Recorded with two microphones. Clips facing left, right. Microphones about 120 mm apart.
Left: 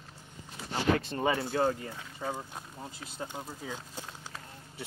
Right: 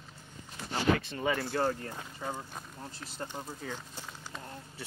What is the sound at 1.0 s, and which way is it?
Speech, 40° left (ahead or behind).